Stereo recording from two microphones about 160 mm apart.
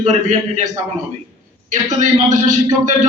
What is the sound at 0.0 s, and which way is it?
Speech, 45° right (ahead or behind).